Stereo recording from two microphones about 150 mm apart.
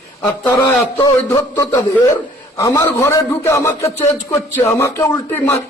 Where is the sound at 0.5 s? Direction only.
25° left (ahead or behind).